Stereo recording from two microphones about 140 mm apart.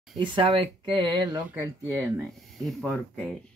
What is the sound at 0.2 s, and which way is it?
Speech, 35° right (ahead or behind).